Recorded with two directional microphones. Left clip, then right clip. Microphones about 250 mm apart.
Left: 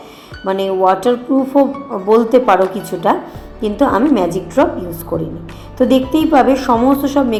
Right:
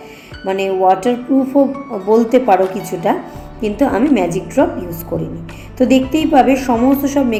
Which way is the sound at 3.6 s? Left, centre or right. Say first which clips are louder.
Left 2 dB; centre.